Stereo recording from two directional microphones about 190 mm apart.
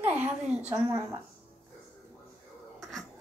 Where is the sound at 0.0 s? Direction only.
10° right (ahead or behind).